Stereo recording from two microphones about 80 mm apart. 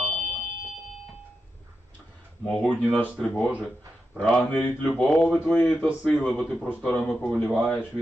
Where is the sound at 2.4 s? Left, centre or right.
Centre.